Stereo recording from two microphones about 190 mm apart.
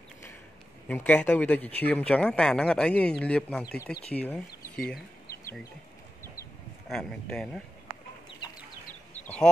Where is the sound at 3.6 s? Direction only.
55° left (ahead or behind).